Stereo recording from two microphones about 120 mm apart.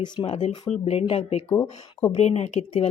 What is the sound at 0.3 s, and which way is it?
Speech, 60° left (ahead or behind).